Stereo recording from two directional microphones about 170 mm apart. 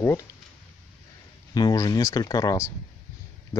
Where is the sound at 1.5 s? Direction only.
25° left (ahead or behind).